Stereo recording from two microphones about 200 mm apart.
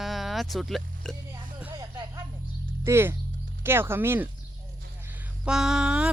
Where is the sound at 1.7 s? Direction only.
20° right (ahead or behind).